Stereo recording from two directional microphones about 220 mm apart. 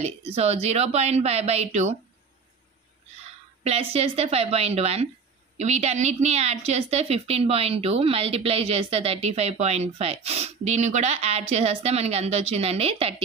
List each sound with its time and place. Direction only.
0.0 s a woman's voice: 30° right (ahead or behind)
3.6 s a woman's voice: 25° right (ahead or behind)